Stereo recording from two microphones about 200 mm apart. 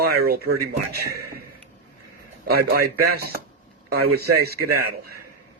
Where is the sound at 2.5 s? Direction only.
50° right (ahead or behind).